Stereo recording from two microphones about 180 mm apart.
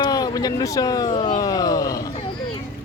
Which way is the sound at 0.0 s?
20° left (ahead or behind).